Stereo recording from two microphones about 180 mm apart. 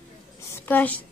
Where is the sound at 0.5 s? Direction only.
10° left (ahead or behind).